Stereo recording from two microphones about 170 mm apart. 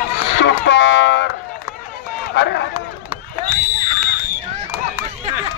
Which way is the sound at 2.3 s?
90° left.